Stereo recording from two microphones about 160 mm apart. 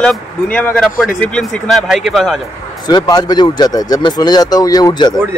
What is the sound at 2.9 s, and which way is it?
Speech, 25° left (ahead or behind).